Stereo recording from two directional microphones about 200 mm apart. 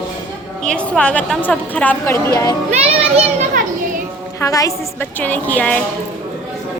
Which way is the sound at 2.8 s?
35° right (ahead or behind).